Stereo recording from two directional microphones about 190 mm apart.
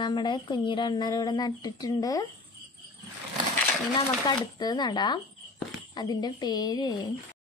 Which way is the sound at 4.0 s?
20° left (ahead or behind).